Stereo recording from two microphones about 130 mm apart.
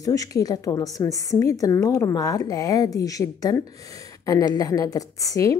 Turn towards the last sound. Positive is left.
turn(degrees=25)  # may be behind; listen again after turning